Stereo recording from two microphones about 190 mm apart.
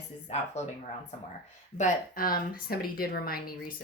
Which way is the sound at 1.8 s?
50° left (ahead or behind).